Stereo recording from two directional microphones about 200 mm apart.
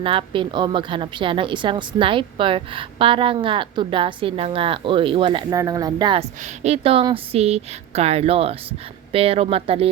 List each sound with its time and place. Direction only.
0.0 s a woman's voice: 25° right (ahead or behind)
6.4 s a woman's voice: 35° right (ahead or behind)